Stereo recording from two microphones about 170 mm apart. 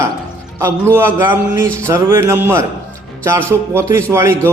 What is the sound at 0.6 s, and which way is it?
A man's voice, 15° right (ahead or behind).